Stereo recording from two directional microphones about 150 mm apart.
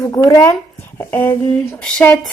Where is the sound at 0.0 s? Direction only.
20° left (ahead or behind).